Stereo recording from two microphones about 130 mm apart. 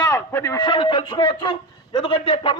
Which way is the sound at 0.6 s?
40° left (ahead or behind).